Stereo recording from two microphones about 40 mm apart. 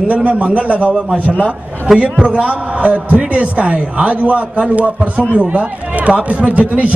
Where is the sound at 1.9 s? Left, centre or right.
Centre.